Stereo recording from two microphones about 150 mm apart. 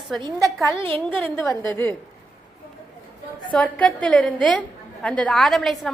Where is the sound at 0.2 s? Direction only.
30° right (ahead or behind).